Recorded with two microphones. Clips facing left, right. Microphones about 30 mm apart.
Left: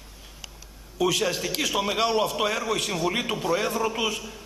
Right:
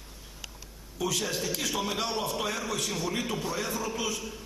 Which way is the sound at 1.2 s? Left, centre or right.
Left.